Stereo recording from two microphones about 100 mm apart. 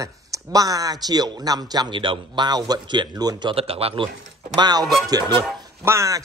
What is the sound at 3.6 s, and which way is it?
Speech, 75° right (ahead or behind).